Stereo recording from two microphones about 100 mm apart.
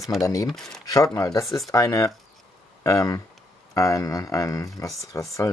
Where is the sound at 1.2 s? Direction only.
35° left (ahead or behind).